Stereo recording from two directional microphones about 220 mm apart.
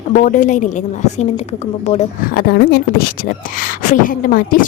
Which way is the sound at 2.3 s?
40° left (ahead or behind).